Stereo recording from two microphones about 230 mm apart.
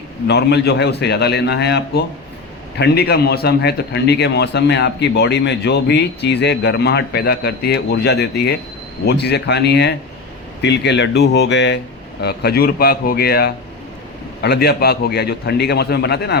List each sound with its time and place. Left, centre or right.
0.3 s a man's voice: left